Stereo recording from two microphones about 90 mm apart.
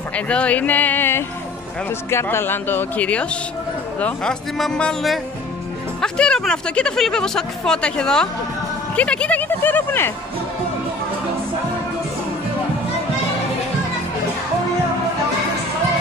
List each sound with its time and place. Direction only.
0.1 s speech: 15° left (ahead or behind)
5.9 s speech: 10° left (ahead or behind); by 10.1 s 25° left (ahead or behind)